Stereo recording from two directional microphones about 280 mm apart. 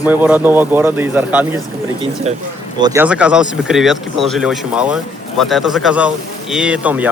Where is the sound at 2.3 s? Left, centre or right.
Right.